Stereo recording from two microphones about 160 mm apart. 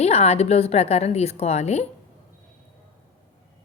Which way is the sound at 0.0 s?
40° left (ahead or behind).